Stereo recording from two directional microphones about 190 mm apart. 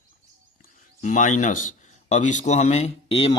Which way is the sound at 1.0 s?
40° left (ahead or behind).